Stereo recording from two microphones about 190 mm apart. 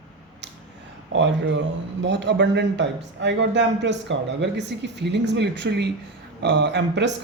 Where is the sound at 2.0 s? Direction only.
70° right (ahead or behind).